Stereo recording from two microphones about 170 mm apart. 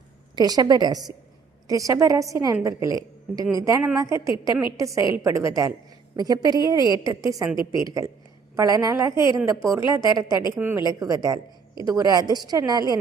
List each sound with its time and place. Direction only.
0.3 s a woman's voice: 25° right (ahead or behind)
7.5 s a woman's voice: 30° left (ahead or behind)
7.9 s a woman's voice: 20° right (ahead or behind)